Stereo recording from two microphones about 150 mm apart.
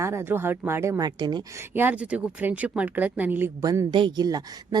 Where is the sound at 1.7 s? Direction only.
10° right (ahead or behind).